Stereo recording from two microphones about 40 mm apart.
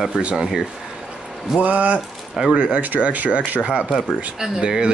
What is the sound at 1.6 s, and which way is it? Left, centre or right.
Speech, right.